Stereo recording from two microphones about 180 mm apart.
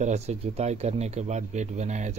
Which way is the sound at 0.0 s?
40° right (ahead or behind).